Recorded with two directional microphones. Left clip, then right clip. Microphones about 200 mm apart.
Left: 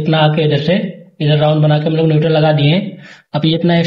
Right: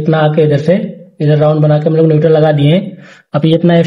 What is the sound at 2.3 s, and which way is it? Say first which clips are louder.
A man's voice: right 3 dB; 50° right (ahead or behind).